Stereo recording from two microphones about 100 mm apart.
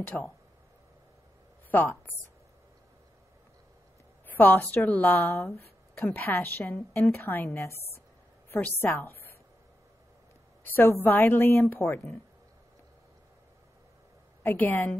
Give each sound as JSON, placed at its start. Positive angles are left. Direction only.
{"t": 0.0, "sound": "a woman's voice", "side_deg": 20}
{"t": 1.7, "sound": "a woman's voice", "side_deg": 20}
{"t": 4.3, "sound": "a woman's voice", "side_deg": 20}
{"t": 10.6, "sound": "a woman's voice", "side_deg": 20}
{"t": 14.4, "sound": "a woman's voice", "side_deg": 20}